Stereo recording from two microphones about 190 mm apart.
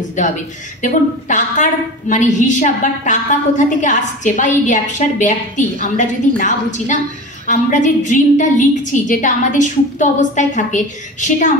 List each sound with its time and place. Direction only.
0.8 s a woman's voice: 40° left (ahead or behind)